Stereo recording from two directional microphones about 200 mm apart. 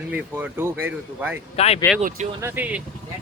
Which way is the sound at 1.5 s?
30° left (ahead or behind).